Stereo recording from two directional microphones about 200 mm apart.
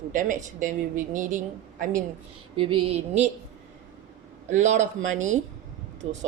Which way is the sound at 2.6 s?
25° right (ahead or behind).